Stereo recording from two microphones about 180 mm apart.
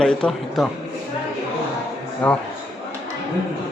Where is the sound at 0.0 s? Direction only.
5° left (ahead or behind).